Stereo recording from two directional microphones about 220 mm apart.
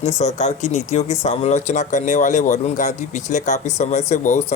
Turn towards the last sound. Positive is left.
turn(degrees=30)  # may be behind; listen again after turning